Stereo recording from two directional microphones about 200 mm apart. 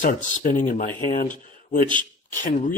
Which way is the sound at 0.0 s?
40° left (ahead or behind).